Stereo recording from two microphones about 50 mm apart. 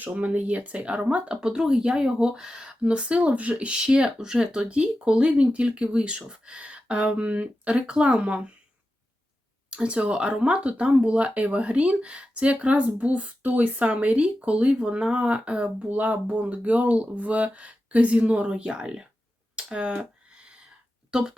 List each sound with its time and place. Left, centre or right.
0.0 s speech: right
9.6 s speech: right
19.5 s a sound: right
21.1 s speech: centre